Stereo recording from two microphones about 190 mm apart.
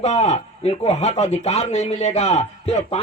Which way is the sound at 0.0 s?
35° left (ahead or behind).